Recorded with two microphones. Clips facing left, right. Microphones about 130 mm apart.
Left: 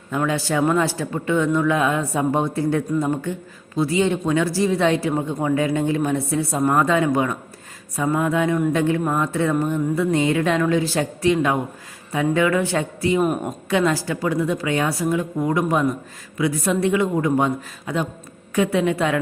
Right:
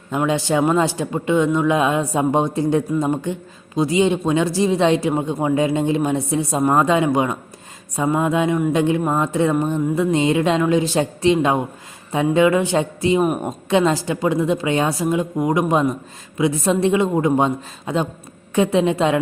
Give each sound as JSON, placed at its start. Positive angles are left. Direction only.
{"t": 0.1, "sound": "speech", "side_deg": -20}